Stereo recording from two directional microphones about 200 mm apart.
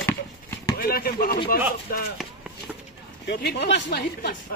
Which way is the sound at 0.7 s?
50° left (ahead or behind).